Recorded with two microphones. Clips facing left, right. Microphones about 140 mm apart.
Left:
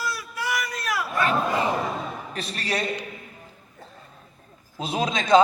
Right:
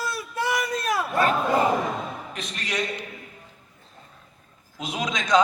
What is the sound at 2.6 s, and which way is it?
Speech, 35° left (ahead or behind).